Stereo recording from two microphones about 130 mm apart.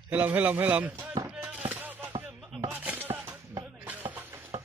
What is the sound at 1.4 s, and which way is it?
Music, 15° right (ahead or behind).